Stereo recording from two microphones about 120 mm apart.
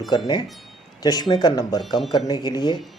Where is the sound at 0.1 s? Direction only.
35° left (ahead or behind).